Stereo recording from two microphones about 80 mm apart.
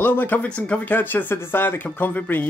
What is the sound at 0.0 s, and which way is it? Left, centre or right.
Speech, left.